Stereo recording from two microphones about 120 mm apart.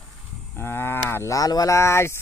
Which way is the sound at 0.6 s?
20° left (ahead or behind).